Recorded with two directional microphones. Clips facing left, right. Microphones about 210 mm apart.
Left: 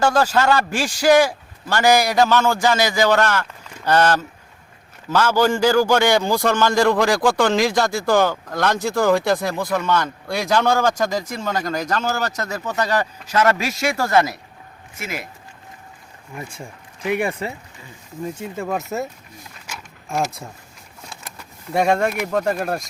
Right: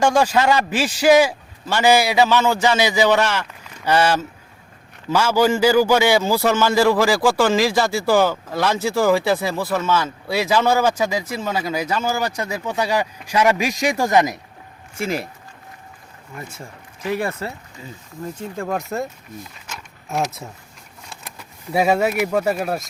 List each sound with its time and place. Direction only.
0.0 s a man's voice: 10° right (ahead or behind)
14.9 s speech: 30° right (ahead or behind)
17.1 s speech: 15° left (ahead or behind)
19.5 s a sound: 5° left (ahead or behind)
21.1 s speech: 5° right (ahead or behind)